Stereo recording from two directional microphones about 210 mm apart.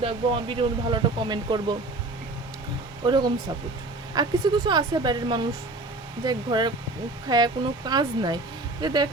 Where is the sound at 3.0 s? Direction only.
20° right (ahead or behind).